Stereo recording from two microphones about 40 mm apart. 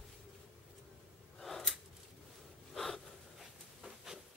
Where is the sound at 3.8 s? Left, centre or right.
Centre.